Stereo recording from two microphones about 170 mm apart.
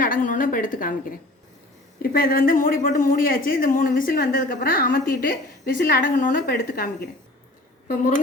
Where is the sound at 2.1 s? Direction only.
55° left (ahead or behind).